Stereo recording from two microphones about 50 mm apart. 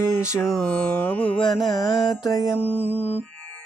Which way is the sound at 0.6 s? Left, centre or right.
Left.